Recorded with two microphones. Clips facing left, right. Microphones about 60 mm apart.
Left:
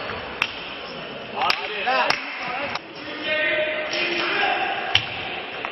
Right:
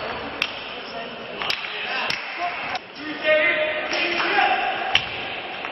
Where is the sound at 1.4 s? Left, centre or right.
Left.